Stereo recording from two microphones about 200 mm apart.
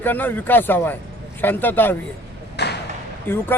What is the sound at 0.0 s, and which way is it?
Speech, 10° left (ahead or behind).